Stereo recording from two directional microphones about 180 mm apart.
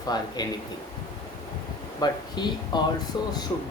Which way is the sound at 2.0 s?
25° left (ahead or behind).